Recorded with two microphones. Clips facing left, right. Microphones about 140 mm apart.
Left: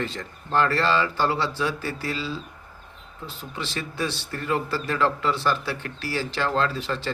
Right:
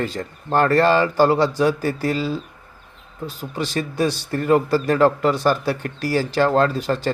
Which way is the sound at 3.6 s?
40° right (ahead or behind).